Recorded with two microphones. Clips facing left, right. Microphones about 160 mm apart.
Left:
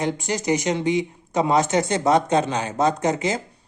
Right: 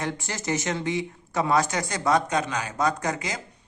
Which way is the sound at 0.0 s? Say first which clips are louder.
Left 7 dB; 15° left (ahead or behind).